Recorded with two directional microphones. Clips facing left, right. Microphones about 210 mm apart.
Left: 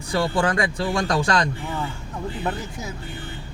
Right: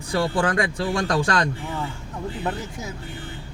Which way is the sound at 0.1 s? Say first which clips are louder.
Even; 50° right (ahead or behind).